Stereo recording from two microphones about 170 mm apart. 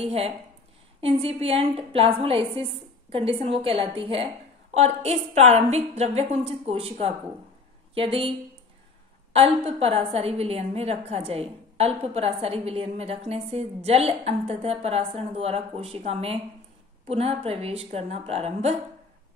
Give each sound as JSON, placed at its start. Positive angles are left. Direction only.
{"t": 0.0, "sound": "a woman's voice", "side_deg": -35}
{"t": 9.7, "sound": "a woman's voice", "side_deg": -35}